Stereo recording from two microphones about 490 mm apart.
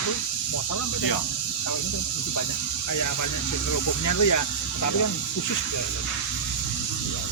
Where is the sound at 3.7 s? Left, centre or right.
Left.